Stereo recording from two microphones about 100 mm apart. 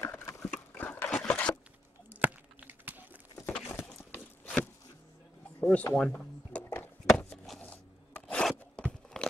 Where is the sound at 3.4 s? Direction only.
15° left (ahead or behind).